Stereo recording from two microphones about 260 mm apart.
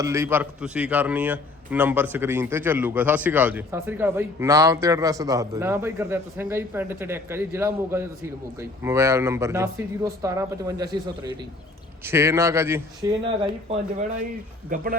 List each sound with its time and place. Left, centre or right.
0.0 s a man's voice: centre
14.7 s speech: right